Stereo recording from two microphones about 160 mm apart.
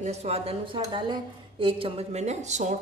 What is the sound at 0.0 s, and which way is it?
A woman's voice, 45° right (ahead or behind).